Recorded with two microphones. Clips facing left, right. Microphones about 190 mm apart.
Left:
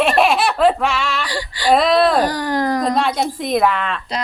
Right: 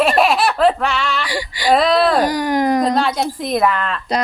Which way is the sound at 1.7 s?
Centre (ahead or behind).